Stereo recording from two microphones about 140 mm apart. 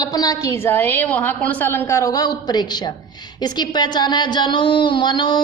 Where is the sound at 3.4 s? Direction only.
30° left (ahead or behind).